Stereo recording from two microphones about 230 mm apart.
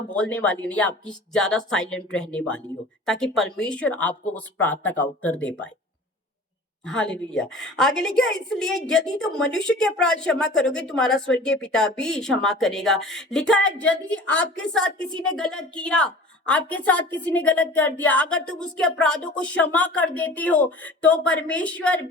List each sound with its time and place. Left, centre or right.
0.1 s speech: centre
6.8 s speech: centre